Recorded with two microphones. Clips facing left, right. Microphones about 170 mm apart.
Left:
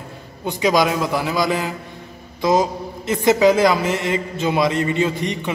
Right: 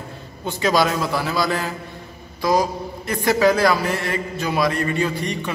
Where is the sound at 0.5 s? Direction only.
15° left (ahead or behind).